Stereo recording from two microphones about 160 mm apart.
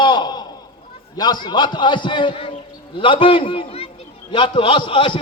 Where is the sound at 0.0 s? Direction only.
30° left (ahead or behind).